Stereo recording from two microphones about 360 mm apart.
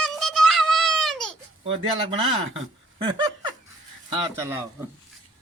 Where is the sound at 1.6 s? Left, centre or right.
Centre.